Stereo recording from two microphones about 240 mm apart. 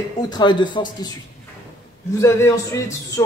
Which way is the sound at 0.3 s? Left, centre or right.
Centre.